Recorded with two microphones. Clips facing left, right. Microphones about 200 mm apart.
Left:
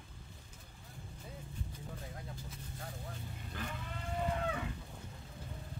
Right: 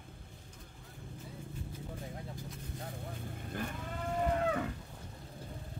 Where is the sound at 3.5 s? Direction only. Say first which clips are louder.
Right 4 dB; 50° right (ahead or behind).